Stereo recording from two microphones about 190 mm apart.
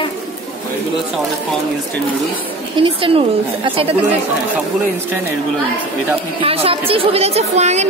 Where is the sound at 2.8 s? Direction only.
30° right (ahead or behind).